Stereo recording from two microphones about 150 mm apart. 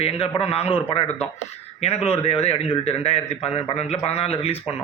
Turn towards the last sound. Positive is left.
turn(degrees=45)  # may be behind; listen again after turning